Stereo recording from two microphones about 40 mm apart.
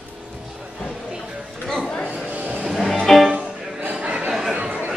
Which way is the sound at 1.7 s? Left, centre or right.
Centre.